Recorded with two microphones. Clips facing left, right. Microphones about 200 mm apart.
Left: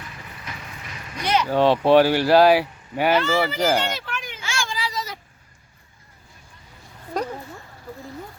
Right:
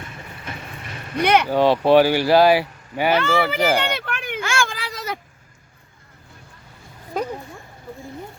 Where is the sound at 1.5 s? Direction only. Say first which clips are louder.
Right 1 dB; 5° right (ahead or behind).